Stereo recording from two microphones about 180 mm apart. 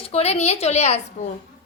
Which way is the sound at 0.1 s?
35° left (ahead or behind).